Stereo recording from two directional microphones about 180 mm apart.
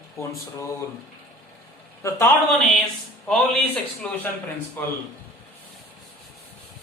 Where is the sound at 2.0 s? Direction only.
15° left (ahead or behind).